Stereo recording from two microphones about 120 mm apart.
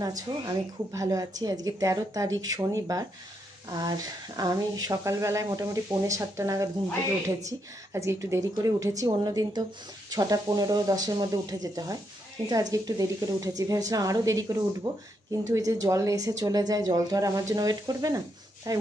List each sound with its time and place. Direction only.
0.3 s a woman's voice: 35° right (ahead or behind)
7.9 s a woman's voice: 25° right (ahead or behind)